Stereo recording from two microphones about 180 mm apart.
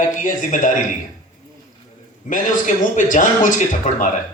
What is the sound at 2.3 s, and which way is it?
Speech, 45° left (ahead or behind).